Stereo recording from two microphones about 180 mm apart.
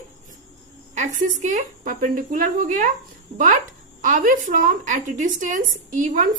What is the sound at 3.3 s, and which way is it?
Speech, 30° right (ahead or behind).